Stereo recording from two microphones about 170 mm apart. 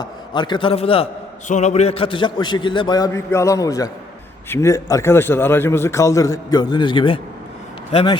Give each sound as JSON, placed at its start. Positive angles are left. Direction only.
{"t": 0.0, "sound": "a man's voice", "side_deg": 25}